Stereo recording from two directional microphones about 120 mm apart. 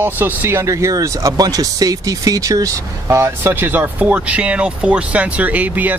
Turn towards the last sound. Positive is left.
turn(degrees=-15)  # may be behind; listen again after turning